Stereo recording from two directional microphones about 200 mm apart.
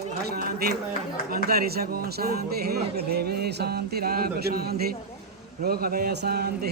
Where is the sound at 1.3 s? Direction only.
50° right (ahead or behind).